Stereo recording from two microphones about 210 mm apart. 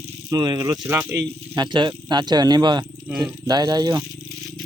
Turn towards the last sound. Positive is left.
turn(degrees=-20)  # may be behind; listen again after turning